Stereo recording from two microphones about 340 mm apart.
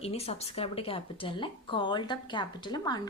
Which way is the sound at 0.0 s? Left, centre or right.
Centre.